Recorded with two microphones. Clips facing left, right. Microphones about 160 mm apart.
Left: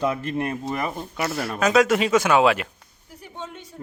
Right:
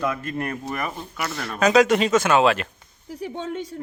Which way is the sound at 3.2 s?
90° right.